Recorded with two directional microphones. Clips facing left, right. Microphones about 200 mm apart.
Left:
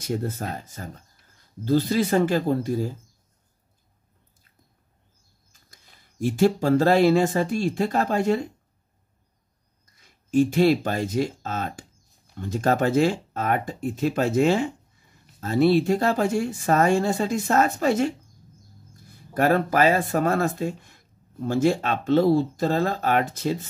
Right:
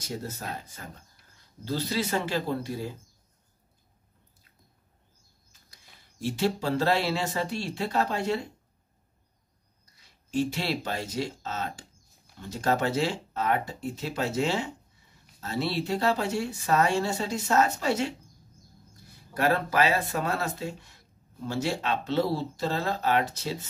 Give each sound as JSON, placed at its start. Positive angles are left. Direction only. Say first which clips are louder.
{"t": 0.0, "sound": "speech", "louder": "left 8 dB", "side_deg": 55}
{"t": 1.6, "sound": "speech", "louder": "left 8 dB", "side_deg": 50}
{"t": 5.7, "sound": "speech", "louder": "left 1 dB", "side_deg": 50}
{"t": 9.9, "sound": "speech", "louder": "left 8 dB", "side_deg": 50}